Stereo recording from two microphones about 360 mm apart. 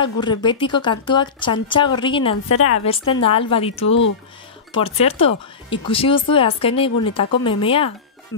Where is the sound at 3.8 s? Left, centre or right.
Left.